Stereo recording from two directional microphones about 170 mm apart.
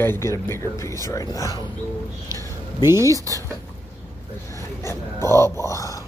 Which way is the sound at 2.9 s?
20° right (ahead or behind).